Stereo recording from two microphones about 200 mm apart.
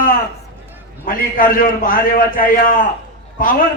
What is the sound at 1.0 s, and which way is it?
A man's voice, 45° left (ahead or behind).